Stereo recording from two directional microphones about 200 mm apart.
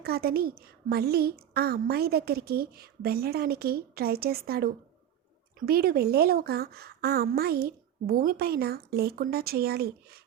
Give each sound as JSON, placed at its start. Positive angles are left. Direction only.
{"t": 0.0, "sound": "a woman's voice", "side_deg": -50}